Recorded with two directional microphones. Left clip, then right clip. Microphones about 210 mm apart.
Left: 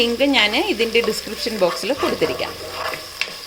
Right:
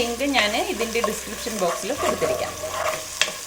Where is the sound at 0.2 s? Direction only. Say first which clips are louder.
Left 5 dB; 50° left (ahead or behind).